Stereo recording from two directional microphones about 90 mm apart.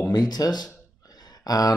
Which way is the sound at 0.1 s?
45° left (ahead or behind).